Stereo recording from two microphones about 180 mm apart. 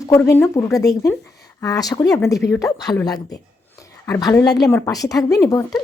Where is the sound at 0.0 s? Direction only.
15° left (ahead or behind).